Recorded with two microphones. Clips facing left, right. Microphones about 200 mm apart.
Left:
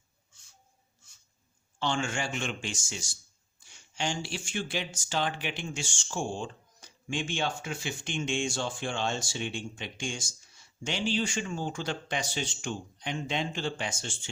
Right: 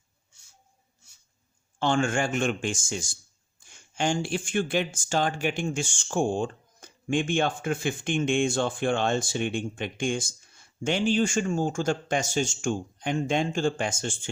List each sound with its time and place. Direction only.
1.8 s speech: 50° right (ahead or behind)